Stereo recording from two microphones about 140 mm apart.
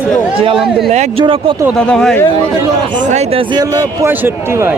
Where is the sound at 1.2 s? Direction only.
40° right (ahead or behind).